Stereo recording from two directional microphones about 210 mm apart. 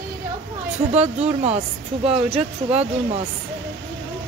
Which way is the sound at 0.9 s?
30° right (ahead or behind).